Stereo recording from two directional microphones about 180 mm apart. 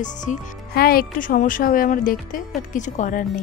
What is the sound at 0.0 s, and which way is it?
A woman's voice, 45° left (ahead or behind).